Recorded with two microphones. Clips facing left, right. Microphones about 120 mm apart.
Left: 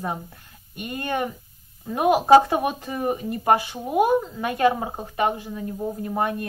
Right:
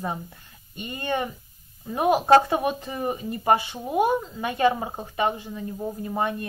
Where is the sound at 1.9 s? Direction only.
5° left (ahead or behind).